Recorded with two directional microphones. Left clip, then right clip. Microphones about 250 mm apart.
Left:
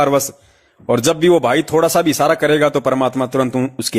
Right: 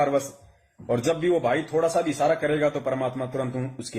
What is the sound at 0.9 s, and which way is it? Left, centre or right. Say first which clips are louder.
A man's voice: left 10 dB; left.